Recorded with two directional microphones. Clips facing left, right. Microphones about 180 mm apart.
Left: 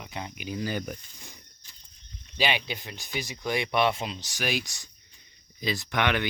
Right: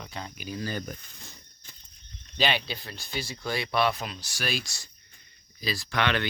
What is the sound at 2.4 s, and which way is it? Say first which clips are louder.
Speech: even; 15° left (ahead or behind).